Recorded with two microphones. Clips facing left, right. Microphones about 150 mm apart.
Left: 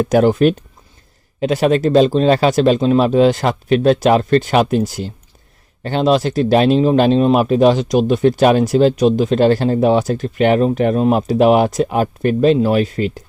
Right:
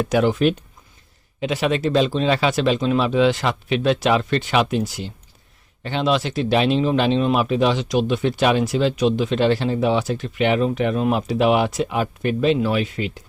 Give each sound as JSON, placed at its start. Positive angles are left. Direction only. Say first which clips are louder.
{"t": 0.0, "sound": "speech", "louder": "left 6 dB", "side_deg": 40}